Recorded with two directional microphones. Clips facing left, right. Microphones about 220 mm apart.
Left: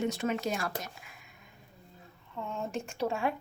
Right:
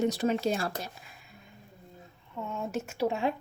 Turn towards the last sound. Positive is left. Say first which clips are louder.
# right 2 dB
turn(degrees=-20)  # may be behind; listen again after turning